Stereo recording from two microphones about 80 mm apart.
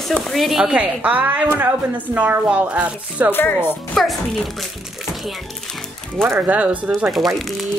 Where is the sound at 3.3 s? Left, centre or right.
Left.